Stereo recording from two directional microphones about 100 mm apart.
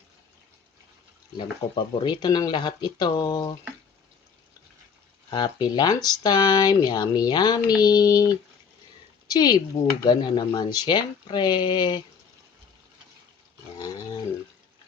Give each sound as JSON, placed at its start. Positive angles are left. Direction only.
{"t": 1.4, "sound": "speech", "side_deg": 50}
{"t": 5.3, "sound": "speech", "side_deg": 45}